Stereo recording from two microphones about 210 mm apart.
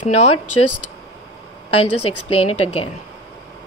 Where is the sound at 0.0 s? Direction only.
30° left (ahead or behind).